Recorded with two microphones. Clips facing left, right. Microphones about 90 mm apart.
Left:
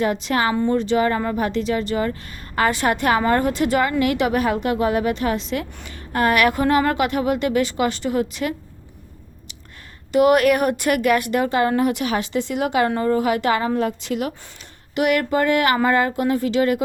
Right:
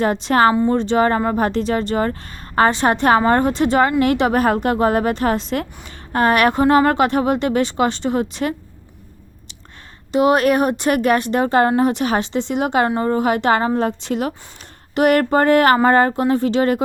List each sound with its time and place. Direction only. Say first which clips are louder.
0.0 s speech: right 5 dB; 35° right (ahead or behind)
5.8 s speech: right 3 dB; 30° right (ahead or behind)
10.1 s a woman's voice: even; 25° right (ahead or behind)